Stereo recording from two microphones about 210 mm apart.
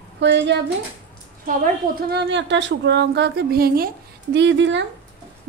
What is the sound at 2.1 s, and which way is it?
A woman's voice, 60° right (ahead or behind).